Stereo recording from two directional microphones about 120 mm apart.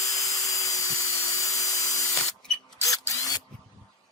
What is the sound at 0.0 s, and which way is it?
Tools, 30° left (ahead or behind).